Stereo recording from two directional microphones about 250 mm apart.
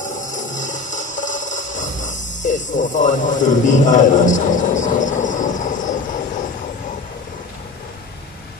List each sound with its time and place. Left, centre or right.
0.0 s mechanisms: left